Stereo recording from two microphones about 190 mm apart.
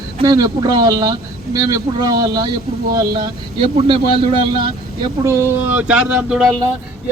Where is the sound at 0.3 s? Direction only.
20° right (ahead or behind).